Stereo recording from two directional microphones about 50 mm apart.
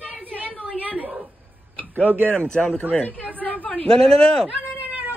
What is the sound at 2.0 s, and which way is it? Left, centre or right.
Speech, right.